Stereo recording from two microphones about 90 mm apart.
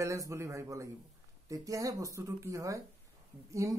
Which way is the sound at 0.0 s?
35° right (ahead or behind).